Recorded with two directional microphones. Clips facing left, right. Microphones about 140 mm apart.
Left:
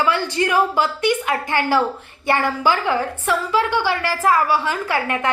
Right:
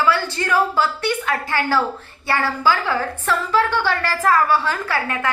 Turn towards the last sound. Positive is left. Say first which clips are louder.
# left 2 dB
turn(degrees=20)  # may be behind; listen again after turning